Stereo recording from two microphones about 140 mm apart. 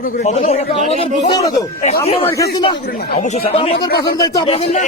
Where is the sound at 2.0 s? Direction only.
45° left (ahead or behind).